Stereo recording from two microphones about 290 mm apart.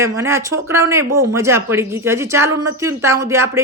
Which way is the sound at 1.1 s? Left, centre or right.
Right.